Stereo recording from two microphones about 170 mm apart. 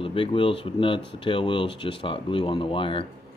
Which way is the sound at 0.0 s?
30° left (ahead or behind).